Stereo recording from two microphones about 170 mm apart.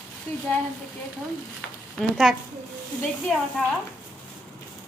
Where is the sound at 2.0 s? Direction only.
Centre (ahead or behind).